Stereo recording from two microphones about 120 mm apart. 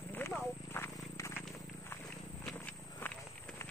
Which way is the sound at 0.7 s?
20° left (ahead or behind).